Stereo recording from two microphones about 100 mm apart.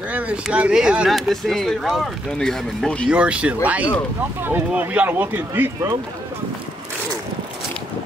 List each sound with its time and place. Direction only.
0.1 s speech: 15° right (ahead or behind); by 3.1 s 5° left (ahead or behind)
3.1 s speech: 10° right (ahead or behind)